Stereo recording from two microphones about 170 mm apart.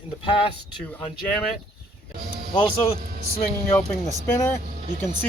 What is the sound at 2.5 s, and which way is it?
Speech, 35° left (ahead or behind).